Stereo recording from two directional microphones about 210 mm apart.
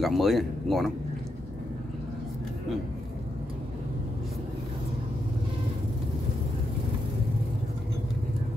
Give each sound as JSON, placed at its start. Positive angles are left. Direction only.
{"t": 0.0, "sound": "speech", "side_deg": 0}